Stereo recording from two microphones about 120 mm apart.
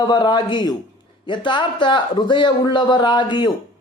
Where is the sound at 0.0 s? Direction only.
40° left (ahead or behind).